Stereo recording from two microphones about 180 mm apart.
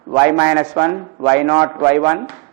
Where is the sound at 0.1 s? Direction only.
15° right (ahead or behind).